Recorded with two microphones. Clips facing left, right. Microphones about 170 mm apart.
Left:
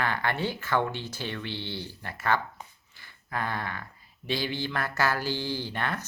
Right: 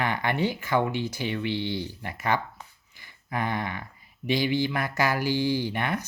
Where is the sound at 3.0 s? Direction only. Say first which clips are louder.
Right 3 dB; 15° right (ahead or behind).